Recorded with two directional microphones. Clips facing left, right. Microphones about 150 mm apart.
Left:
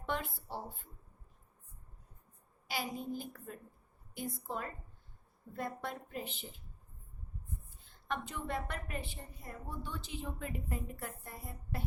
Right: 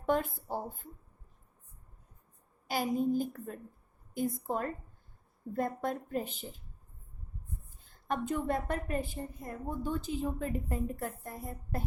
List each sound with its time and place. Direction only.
0.0 s a woman's voice: 45° right (ahead or behind)
2.6 s a woman's voice: 45° right (ahead or behind)
7.9 s a woman's voice: 45° right (ahead or behind)